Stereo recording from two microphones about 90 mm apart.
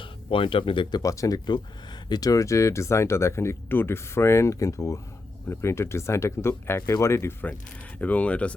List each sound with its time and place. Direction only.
0.0 s speech: 75° left (ahead or behind)
1.0 s speech: 40° left (ahead or behind)
1.5 s speech: 55° left (ahead or behind); by 7.3 s 30° left (ahead or behind)
7.9 s speech: 15° left (ahead or behind)